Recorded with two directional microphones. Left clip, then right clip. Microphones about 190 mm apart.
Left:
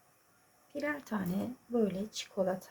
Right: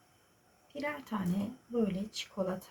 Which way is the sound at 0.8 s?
35° left (ahead or behind).